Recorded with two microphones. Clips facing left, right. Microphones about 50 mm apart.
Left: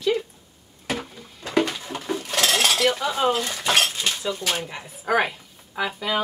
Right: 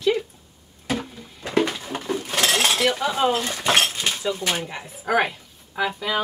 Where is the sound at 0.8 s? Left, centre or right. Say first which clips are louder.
Right 2 dB; centre.